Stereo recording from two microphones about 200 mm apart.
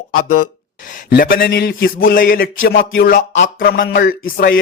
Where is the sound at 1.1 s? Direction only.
50° left (ahead or behind).